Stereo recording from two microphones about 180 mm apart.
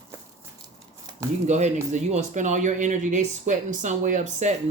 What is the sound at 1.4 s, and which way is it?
Speech, 40° right (ahead or behind).